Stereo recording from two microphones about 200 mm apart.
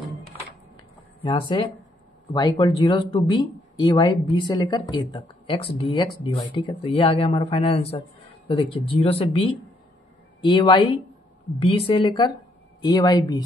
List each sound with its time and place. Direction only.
1.2 s speech: 25° left (ahead or behind)
2.6 s speech: 20° left (ahead or behind)